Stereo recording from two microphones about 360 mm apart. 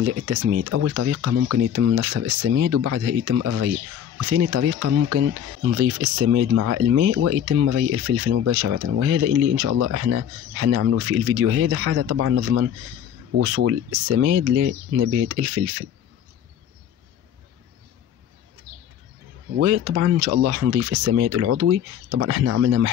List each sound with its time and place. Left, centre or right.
0.2 s speech: right
19.6 s speech: right